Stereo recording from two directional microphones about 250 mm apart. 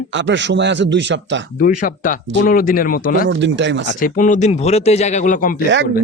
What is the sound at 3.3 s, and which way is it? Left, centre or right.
Speech, right.